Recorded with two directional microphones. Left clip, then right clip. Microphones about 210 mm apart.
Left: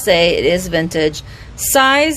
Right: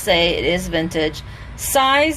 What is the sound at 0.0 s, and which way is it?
A woman's voice, 45° left (ahead or behind).